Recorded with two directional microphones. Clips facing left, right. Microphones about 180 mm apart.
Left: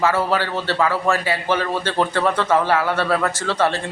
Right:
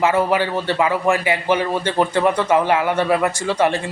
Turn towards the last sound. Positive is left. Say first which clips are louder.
# right 2 dB
turn(degrees=-15)  # may be behind; listen again after turning